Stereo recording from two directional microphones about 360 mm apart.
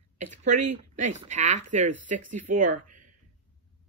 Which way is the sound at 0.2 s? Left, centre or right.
Right.